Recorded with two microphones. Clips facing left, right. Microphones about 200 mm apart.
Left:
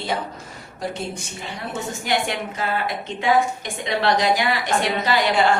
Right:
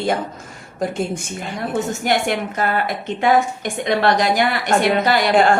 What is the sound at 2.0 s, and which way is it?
Speech, 55° right (ahead or behind).